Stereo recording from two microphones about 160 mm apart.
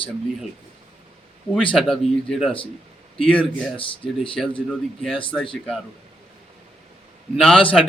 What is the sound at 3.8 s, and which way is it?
Speech, 35° left (ahead or behind).